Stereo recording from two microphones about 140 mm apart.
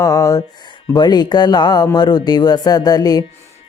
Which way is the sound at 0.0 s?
25° left (ahead or behind).